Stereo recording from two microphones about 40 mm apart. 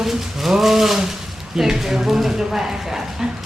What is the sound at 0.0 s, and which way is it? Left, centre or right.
Speech, centre.